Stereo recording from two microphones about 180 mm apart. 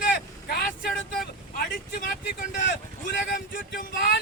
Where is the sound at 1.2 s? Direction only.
55° left (ahead or behind).